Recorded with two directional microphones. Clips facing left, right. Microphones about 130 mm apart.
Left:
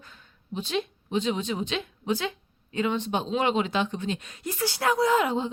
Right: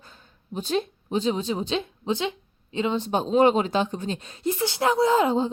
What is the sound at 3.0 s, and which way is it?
Speech, 40° right (ahead or behind).